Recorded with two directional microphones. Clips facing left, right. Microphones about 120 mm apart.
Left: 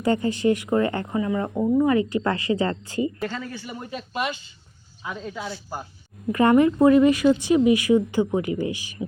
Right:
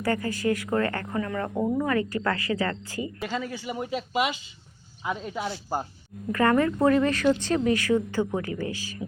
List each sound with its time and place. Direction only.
0.0 s speech: 25° left (ahead or behind)
3.2 s speech: 10° right (ahead or behind)
6.3 s speech: 20° left (ahead or behind)